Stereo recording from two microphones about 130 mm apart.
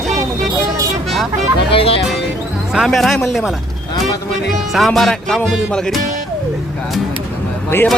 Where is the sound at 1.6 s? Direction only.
45° left (ahead or behind).